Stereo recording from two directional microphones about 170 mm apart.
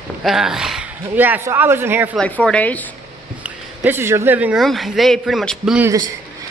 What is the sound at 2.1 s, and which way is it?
Speech, 5° left (ahead or behind).